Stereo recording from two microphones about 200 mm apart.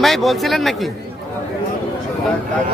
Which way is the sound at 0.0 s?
Centre (ahead or behind).